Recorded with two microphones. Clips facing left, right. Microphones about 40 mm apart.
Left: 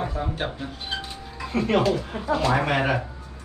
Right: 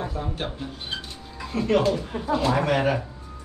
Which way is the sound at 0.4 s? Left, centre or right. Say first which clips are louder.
Left 2 dB; centre.